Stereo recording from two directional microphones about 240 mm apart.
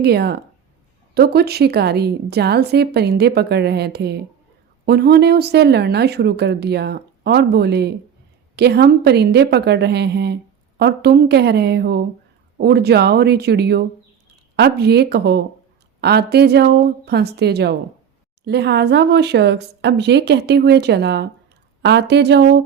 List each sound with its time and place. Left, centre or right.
0.0 s speech: right